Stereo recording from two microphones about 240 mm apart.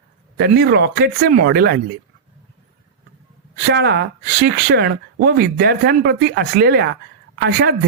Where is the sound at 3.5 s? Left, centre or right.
Right.